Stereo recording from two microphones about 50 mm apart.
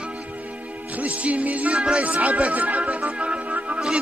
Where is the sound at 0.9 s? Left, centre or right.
Right.